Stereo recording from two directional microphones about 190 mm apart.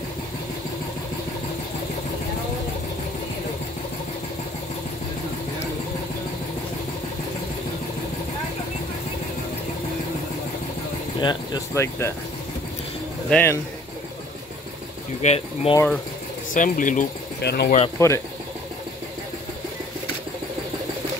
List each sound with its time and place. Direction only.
11.1 s speech: 20° left (ahead or behind)
13.3 s speech: 10° left (ahead or behind)
15.2 s speech: 30° left (ahead or behind)
16.5 s speech: 45° left (ahead or behind)
17.4 s speech: 60° left (ahead or behind)
17.6 s speech: 35° left (ahead or behind)
17.9 s speech: 15° left (ahead or behind)